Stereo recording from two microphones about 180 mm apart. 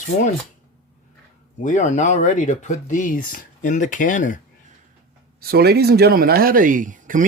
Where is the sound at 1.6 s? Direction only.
45° left (ahead or behind).